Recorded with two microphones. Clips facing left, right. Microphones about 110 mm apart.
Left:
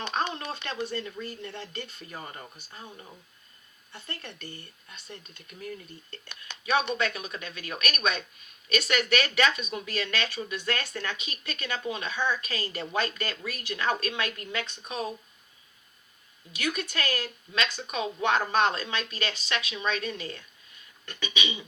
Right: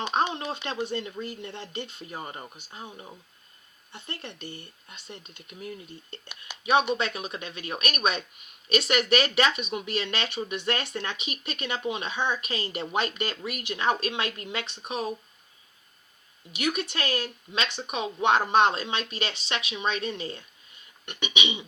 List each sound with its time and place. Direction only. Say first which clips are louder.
0.3 s speech: right 3 dB; 15° right (ahead or behind)
6.9 s speech: right 1 dB; 25° right (ahead or behind)
16.5 s speech: right 3 dB; 25° right (ahead or behind)